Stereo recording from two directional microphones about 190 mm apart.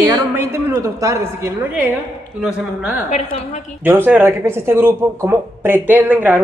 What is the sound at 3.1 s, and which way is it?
Speech, 40° left (ahead or behind).